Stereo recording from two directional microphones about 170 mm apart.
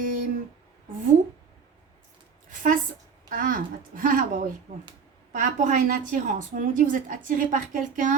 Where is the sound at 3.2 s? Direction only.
55° right (ahead or behind).